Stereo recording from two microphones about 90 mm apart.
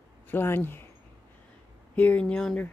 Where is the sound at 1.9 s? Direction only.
15° left (ahead or behind).